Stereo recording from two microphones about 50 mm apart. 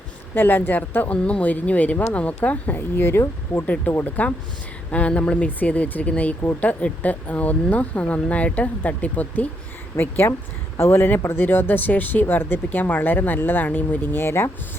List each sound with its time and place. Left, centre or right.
0.3 s speech: left
2.7 s speech: left
3.7 s speech: left
10.0 s speech: left